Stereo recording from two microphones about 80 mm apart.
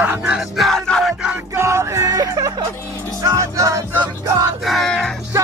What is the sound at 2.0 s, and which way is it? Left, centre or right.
Speech, right.